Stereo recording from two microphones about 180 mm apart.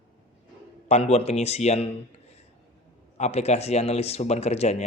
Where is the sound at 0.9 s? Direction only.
35° left (ahead or behind).